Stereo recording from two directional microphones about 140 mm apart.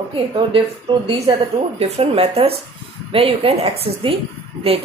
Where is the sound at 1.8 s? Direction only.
45° right (ahead or behind).